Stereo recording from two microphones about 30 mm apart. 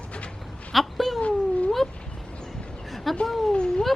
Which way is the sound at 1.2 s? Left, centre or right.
Left.